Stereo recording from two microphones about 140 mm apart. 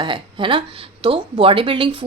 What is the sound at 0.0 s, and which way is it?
Speech, 35° right (ahead or behind).